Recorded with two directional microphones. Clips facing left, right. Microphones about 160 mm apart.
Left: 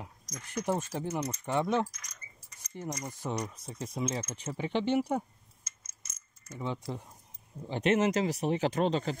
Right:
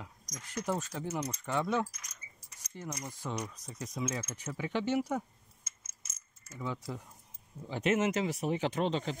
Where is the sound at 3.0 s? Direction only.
20° left (ahead or behind).